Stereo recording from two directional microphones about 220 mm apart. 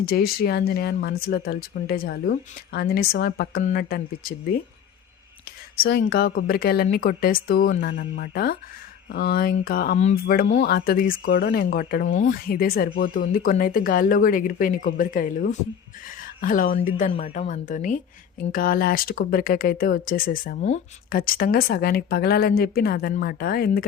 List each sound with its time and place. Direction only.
0.0 s speech: 45° left (ahead or behind)
5.8 s speech: 45° left (ahead or behind)